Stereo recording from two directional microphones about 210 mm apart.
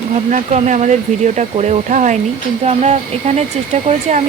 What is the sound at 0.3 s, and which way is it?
Speech, 35° right (ahead or behind).